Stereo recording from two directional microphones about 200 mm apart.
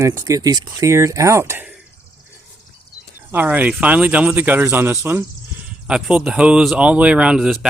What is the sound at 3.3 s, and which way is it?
Speech, 10° right (ahead or behind).